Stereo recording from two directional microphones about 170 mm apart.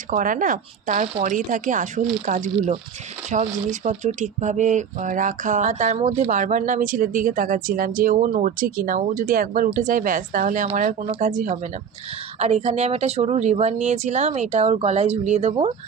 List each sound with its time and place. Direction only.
0.1 s speech: 50° right (ahead or behind)